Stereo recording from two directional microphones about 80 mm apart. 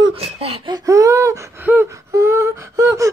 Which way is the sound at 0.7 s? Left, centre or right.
Right.